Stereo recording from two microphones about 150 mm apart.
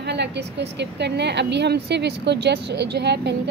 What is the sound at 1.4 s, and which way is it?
A woman's voice, 90° right.